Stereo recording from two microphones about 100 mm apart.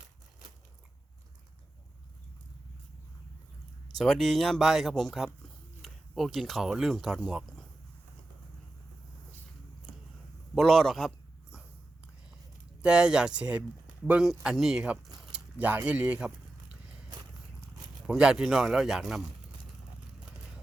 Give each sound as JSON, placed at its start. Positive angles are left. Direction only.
{"t": 3.9, "sound": "speech", "side_deg": 0}
{"t": 10.5, "sound": "speech", "side_deg": 0}
{"t": 12.8, "sound": "speech", "side_deg": -10}
{"t": 18.0, "sound": "speech", "side_deg": -5}